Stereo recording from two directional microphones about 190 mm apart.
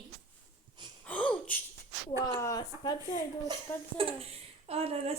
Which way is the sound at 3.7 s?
10° left (ahead or behind).